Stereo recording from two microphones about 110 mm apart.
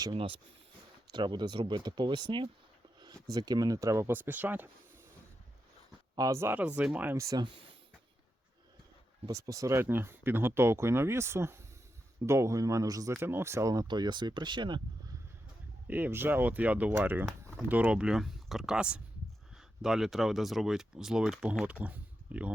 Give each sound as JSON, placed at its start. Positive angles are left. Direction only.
{"t": 1.1, "sound": "speech", "side_deg": -40}
{"t": 6.1, "sound": "speech", "side_deg": -30}
{"t": 7.2, "sound": "speech", "side_deg": -30}
{"t": 9.3, "sound": "speech", "side_deg": -30}
{"t": 13.1, "sound": "speech", "side_deg": -20}
{"t": 13.8, "sound": "speech", "side_deg": -45}
{"t": 15.9, "sound": "speech", "side_deg": -20}